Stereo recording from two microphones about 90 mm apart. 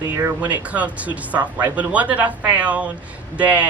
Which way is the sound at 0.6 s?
15° right (ahead or behind).